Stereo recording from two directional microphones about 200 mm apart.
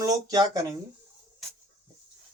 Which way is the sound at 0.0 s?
20° right (ahead or behind).